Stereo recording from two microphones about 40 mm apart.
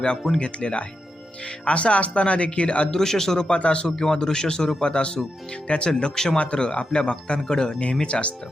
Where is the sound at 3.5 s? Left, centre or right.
Left.